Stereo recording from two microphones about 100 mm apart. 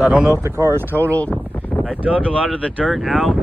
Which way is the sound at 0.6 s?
30° right (ahead or behind).